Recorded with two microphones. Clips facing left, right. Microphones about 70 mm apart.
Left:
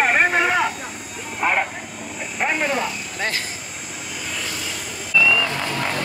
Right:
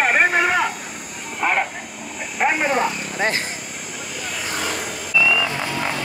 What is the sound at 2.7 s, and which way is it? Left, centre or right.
Speech, right.